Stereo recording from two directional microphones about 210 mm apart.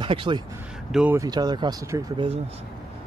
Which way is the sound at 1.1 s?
20° right (ahead or behind).